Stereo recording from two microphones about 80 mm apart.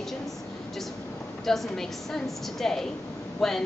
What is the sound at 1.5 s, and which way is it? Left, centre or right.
A woman's voice, centre.